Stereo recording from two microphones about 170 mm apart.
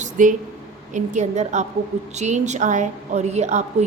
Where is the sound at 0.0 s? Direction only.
50° right (ahead or behind).